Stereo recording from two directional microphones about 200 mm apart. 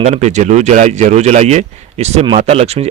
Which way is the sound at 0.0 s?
35° right (ahead or behind).